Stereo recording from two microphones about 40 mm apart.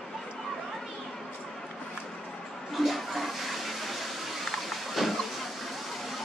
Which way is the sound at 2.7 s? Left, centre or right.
Centre.